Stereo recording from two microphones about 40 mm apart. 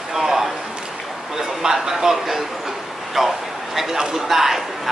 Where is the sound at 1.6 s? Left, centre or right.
Centre.